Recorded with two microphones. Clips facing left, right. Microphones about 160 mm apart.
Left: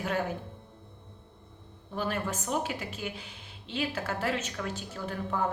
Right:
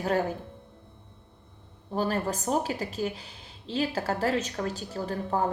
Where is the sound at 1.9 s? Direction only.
35° right (ahead or behind).